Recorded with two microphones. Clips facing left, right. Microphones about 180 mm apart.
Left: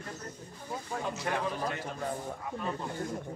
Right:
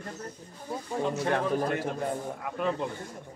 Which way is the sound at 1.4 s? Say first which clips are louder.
Right 6 dB; 45° right (ahead or behind).